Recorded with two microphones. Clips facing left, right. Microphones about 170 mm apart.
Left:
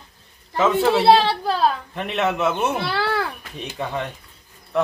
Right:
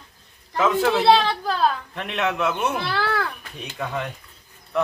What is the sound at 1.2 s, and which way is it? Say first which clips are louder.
Speech: left 2 dB; 30° left (ahead or behind).